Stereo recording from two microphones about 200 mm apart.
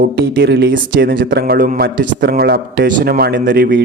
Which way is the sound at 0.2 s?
60° right (ahead or behind).